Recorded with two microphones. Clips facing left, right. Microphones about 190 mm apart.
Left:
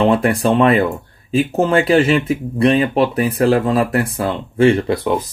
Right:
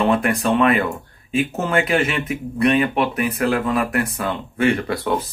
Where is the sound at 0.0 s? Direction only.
30° left (ahead or behind).